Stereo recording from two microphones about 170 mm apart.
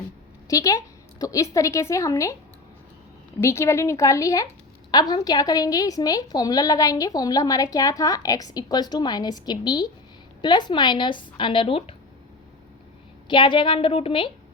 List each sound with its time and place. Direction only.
0.4 s a woman's voice: 20° left (ahead or behind)
3.4 s a woman's voice: 15° left (ahead or behind); by 11.9 s 35° left (ahead or behind)
13.2 s a woman's voice: 30° left (ahead or behind)